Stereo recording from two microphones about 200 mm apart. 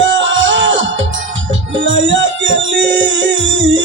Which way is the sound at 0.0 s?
65° right (ahead or behind).